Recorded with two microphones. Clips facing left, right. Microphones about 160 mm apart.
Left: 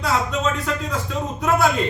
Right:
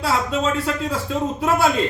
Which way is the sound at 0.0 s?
30° right (ahead or behind).